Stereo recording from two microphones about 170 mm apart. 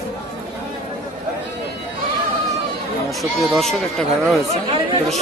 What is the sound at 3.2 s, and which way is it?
Speech, centre (ahead or behind).